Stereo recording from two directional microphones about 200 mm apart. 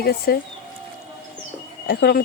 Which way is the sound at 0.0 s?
50° left (ahead or behind).